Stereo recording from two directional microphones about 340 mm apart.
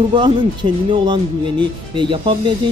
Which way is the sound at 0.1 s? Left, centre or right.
Centre.